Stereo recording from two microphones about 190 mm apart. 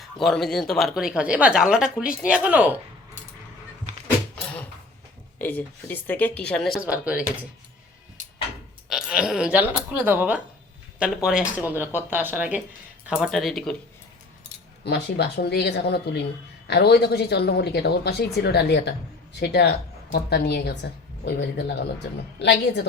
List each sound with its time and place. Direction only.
0.0 s speech: centre (ahead or behind)
4.4 s a sound: 5° left (ahead or behind)
5.4 s speech: 10° left (ahead or behind); by 7.3 s 5° right (ahead or behind)
8.9 s speech: 5° right (ahead or behind)
14.8 s a woman's voice: 60° left (ahead or behind)